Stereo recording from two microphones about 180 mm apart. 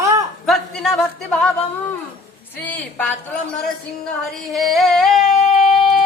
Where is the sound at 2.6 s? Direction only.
10° left (ahead or behind).